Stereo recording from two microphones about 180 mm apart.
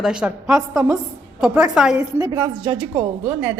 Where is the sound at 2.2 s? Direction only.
20° right (ahead or behind).